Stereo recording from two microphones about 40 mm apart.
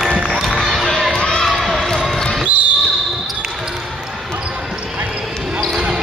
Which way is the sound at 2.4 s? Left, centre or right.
Right.